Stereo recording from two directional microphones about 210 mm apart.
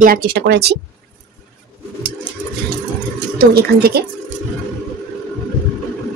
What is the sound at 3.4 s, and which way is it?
Speech, 45° right (ahead or behind).